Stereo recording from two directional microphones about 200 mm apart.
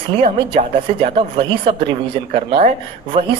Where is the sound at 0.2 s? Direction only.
30° right (ahead or behind).